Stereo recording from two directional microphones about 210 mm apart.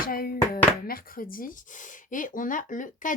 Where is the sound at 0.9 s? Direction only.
45° left (ahead or behind).